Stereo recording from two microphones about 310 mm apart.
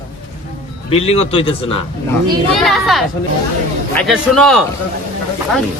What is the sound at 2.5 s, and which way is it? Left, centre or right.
A man's voice, centre.